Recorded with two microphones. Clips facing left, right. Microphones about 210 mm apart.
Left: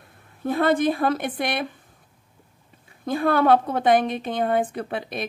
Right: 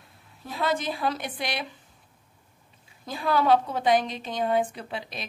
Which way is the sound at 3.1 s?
55° left (ahead or behind).